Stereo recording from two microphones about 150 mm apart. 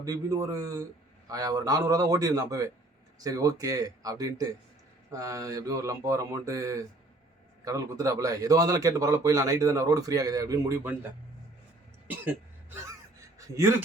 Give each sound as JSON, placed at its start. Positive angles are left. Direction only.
{"t": 0.0, "sound": "a man's voice", "side_deg": -20}
{"t": 13.6, "sound": "speech", "side_deg": -20}